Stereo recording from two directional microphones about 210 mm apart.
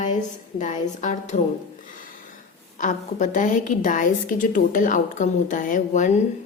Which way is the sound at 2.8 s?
35° left (ahead or behind).